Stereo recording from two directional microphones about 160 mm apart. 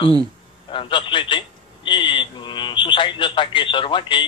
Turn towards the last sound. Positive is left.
turn(degrees=30)  # may be behind; listen again after turning